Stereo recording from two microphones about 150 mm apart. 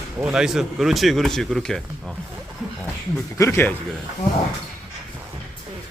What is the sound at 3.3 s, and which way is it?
Speech, 20° left (ahead or behind).